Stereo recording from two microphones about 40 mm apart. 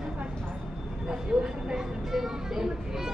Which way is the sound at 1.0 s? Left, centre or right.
Right.